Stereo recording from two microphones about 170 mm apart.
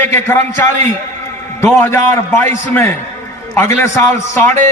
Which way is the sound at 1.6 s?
15° left (ahead or behind).